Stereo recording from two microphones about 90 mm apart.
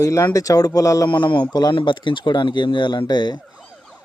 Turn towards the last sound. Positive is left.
turn(degrees=55)  # may be behind; listen again after turning